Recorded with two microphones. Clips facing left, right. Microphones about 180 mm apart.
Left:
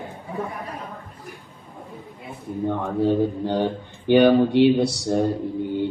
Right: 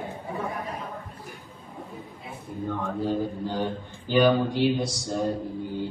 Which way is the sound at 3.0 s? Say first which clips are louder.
Left 8 dB; 65° left (ahead or behind).